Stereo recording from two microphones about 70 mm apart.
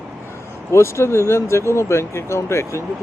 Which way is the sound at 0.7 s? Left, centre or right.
Left.